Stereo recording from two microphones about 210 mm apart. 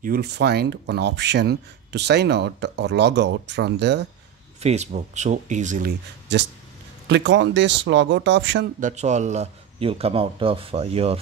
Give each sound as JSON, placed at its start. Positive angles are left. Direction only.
{"t": 0.0, "sound": "speech", "side_deg": -50}
{"t": 4.6, "sound": "speech", "side_deg": -30}
{"t": 8.7, "sound": "speech", "side_deg": -35}